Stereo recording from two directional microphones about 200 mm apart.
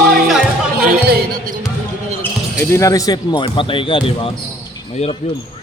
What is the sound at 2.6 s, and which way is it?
Speech, 15° left (ahead or behind).